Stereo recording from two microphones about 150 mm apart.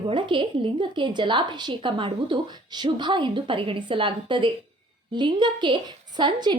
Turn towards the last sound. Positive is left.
turn(degrees=-30)  # may be behind; listen again after turning